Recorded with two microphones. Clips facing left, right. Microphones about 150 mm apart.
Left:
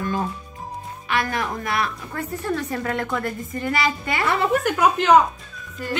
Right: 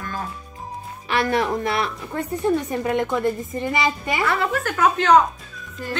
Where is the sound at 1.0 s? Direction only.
30° right (ahead or behind).